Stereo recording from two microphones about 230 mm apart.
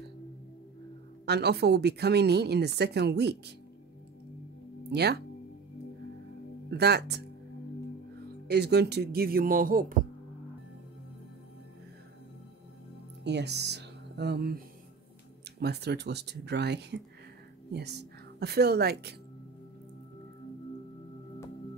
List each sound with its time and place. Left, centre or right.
1.2 s speech: right
4.9 s speech: right
6.7 s speech: right
8.5 s speech: right
13.2 s speech: right
15.6 s a woman's voice: right